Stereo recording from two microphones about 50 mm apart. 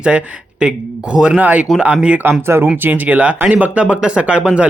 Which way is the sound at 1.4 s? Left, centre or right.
Right.